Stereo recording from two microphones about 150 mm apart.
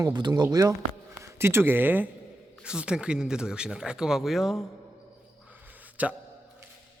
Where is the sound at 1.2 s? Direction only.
15° right (ahead or behind); by 4.5 s centre (ahead or behind).